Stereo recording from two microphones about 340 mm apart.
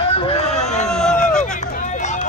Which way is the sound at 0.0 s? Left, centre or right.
Centre.